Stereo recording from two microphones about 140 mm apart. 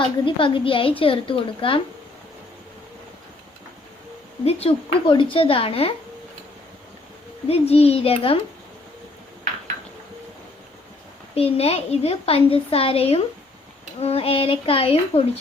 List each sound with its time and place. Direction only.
0.3 s a woman's voice: 35° left (ahead or behind)
4.4 s a woman's voice: 40° left (ahead or behind)
7.4 s speech: 45° left (ahead or behind)
11.3 s speech: 45° left (ahead or behind)